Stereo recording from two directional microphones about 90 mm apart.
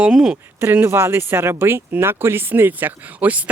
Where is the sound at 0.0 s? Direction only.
10° right (ahead or behind).